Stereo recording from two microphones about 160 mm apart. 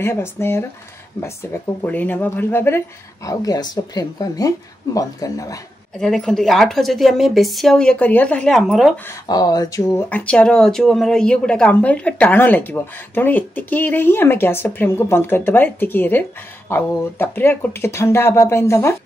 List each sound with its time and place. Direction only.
0.0 s speech: 15° left (ahead or behind)
5.9 s a woman's voice: 5° left (ahead or behind)
8.9 s speech: 15° left (ahead or behind)
10.0 s speech: 10° left (ahead or behind)